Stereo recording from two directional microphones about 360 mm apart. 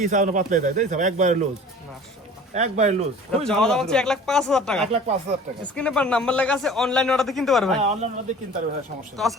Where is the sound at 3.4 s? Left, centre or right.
Centre.